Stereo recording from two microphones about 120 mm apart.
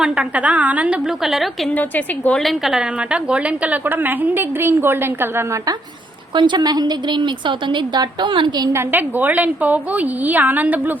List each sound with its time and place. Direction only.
0.0 s a woman's voice: 10° right (ahead or behind)
1.7 s a woman's voice: 15° left (ahead or behind)
2.4 s a woman's voice: centre (ahead or behind); by 5.5 s 20° right (ahead or behind)
6.3 s a woman's voice: 40° right (ahead or behind)
8.7 s a woman's voice: 15° right (ahead or behind)